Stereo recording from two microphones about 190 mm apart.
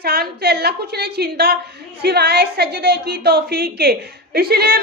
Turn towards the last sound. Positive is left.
turn(degrees=-55)  # may be behind; listen again after turning